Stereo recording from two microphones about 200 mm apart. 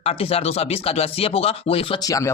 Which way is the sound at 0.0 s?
30° left (ahead or behind).